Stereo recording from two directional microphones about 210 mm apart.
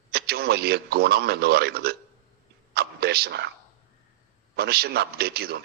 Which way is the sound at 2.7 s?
50° right (ahead or behind).